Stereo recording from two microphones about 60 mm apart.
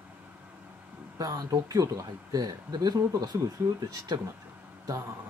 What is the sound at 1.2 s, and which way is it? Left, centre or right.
Speech, right.